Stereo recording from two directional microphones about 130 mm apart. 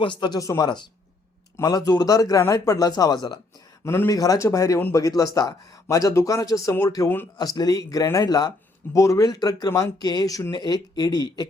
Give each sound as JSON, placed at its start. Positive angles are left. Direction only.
{"t": 0.0, "sound": "speech", "side_deg": 40}
{"t": 3.8, "sound": "speech", "side_deg": 20}